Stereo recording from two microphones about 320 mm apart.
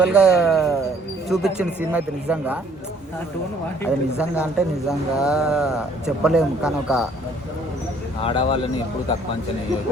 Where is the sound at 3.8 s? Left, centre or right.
Centre.